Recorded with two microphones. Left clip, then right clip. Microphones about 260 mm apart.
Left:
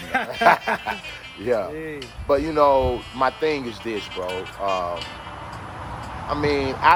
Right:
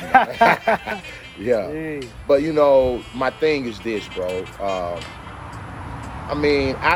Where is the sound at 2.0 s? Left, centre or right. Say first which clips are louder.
Right 4 dB; centre.